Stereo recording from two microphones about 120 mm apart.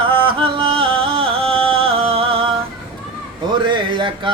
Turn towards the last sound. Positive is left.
turn(degrees=-45)  # may be behind; listen again after turning